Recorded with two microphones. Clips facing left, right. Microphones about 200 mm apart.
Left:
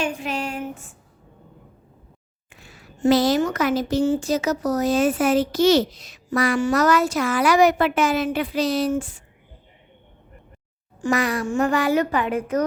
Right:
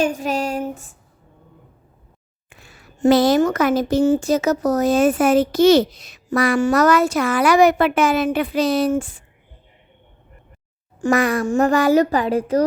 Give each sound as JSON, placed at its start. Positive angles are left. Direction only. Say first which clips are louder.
{"t": 0.0, "sound": "a sound", "louder": "right 6 dB", "side_deg": -40}
{"t": 3.0, "sound": "speech", "louder": "right 4 dB", "side_deg": -55}
{"t": 11.0, "sound": "speech", "louder": "right 4 dB", "side_deg": -50}